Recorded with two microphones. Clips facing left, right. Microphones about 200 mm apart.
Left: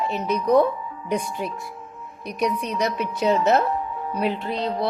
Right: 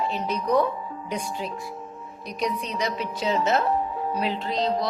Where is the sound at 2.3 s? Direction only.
55° left (ahead or behind).